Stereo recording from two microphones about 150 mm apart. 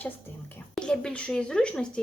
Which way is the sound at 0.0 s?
10° left (ahead or behind).